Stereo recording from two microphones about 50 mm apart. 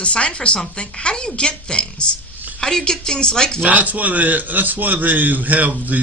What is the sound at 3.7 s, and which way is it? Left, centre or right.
A man's voice, right.